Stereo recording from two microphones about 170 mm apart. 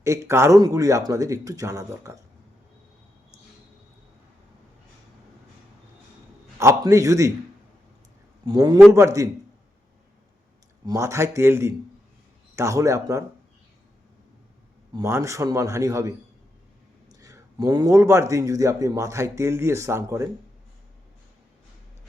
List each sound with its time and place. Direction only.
0.0 s speech: 15° right (ahead or behind)
6.6 s a man's voice: 15° right (ahead or behind)
8.4 s a man's voice: 20° right (ahead or behind)
10.8 s a man's voice: 15° right (ahead or behind)
14.9 s a man's voice: 15° right (ahead or behind)